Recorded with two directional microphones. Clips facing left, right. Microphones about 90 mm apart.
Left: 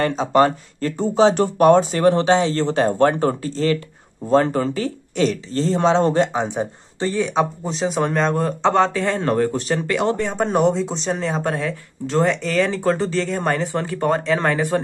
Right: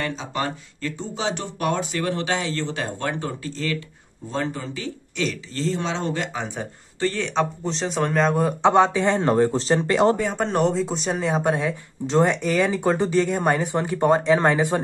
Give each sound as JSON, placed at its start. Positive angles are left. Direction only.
{"t": 0.0, "sound": "speech", "side_deg": 45}
{"t": 4.3, "sound": "speech", "side_deg": 55}
{"t": 6.4, "sound": "speech", "side_deg": 20}
{"t": 10.1, "sound": "speech", "side_deg": 0}